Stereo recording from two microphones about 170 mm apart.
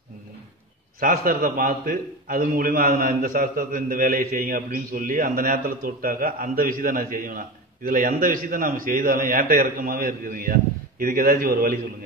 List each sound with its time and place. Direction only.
0.9 s a man's voice: 55° right (ahead or behind)